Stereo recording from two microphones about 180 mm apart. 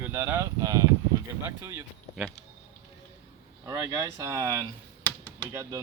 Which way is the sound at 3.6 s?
20° right (ahead or behind).